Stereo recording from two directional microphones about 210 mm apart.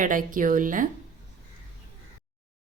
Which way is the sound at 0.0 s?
40° right (ahead or behind).